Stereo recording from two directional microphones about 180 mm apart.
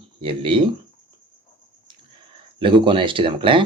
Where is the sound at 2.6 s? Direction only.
30° right (ahead or behind).